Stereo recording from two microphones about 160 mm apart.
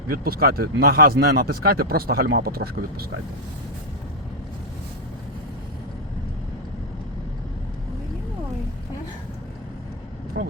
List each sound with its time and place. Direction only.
0.1 s a man's voice: 70° right (ahead or behind)